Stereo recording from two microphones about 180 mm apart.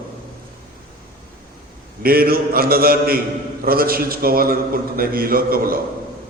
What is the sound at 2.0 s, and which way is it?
A man's voice, 55° right (ahead or behind).